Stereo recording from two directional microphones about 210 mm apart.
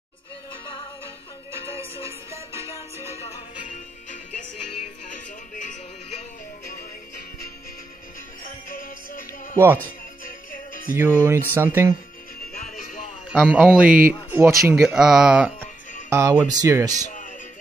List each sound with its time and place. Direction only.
1.6 s music: 25° left (ahead or behind)
5.1 s music: 35° left (ahead or behind)
8.6 s music: 40° left (ahead or behind)
11.0 s speech: 10° right (ahead or behind)
13.3 s speech: 5° right (ahead or behind)